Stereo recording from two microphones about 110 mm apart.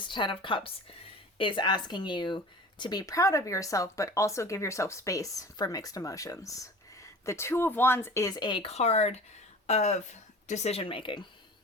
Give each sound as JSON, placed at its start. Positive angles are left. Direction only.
{"t": 0.1, "sound": "speech", "side_deg": 50}
{"t": 8.6, "sound": "speech", "side_deg": 75}